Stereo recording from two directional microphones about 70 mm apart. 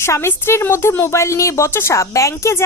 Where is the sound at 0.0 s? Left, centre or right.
Left.